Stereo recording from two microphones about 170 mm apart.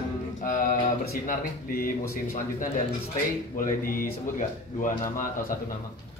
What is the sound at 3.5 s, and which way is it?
Speech, 55° left (ahead or behind).